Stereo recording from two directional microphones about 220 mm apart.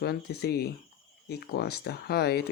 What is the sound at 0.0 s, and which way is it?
Speech, 45° left (ahead or behind).